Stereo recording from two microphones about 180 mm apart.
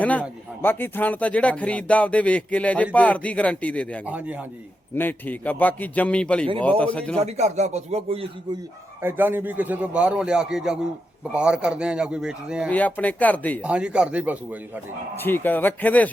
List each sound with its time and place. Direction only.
0.0 s a man's voice: 10° left (ahead or behind)
4.0 s a man's voice: 10° right (ahead or behind)
4.9 s a man's voice: 10° left (ahead or behind)
7.2 s speech: 40° right (ahead or behind)
9.0 s a man's voice: 10° right (ahead or behind)
12.7 s a man's voice: 10° left (ahead or behind)
13.6 s speech: 5° right (ahead or behind)
15.2 s a man's voice: 10° left (ahead or behind)